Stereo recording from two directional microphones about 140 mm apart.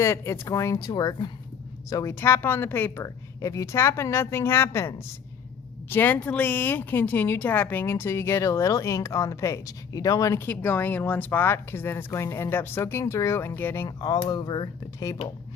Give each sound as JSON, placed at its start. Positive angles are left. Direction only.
{"t": 0.0, "sound": "a woman's voice", "side_deg": 20}
{"t": 13.8, "sound": "a woman's voice", "side_deg": 30}